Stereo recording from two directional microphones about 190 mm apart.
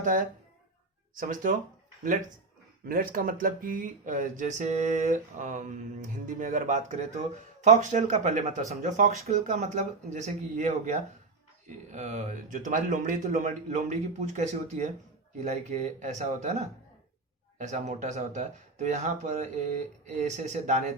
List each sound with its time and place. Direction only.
0.0 s speech: 45° right (ahead or behind)
2.8 s speech: 50° right (ahead or behind)